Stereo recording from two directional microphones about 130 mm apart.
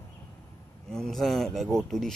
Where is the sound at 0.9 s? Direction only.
5° left (ahead or behind).